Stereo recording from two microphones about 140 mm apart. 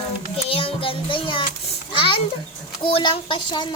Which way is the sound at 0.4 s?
40° left (ahead or behind).